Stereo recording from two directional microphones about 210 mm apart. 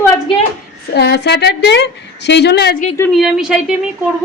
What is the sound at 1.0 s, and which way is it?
A woman's voice, 50° left (ahead or behind).